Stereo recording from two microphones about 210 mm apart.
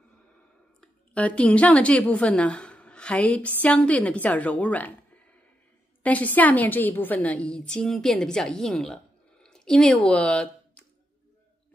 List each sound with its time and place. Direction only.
0.7 s a woman's voice: 5° left (ahead or behind)